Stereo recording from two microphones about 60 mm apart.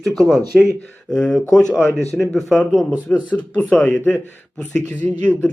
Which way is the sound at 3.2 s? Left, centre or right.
Left.